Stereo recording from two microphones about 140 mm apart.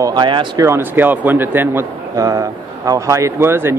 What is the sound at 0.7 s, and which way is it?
A man's voice, 15° right (ahead or behind).